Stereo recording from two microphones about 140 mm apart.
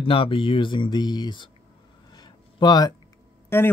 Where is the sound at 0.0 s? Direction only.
40° left (ahead or behind).